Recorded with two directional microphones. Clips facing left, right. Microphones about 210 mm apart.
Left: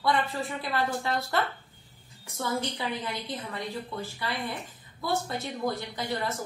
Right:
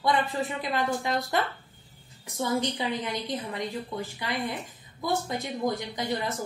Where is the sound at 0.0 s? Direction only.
20° right (ahead or behind).